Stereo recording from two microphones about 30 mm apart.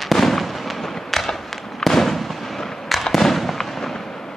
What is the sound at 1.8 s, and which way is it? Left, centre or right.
Fireworks, centre.